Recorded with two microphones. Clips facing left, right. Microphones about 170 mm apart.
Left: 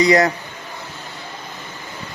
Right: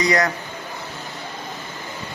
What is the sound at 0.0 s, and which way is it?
Speech, 25° left (ahead or behind).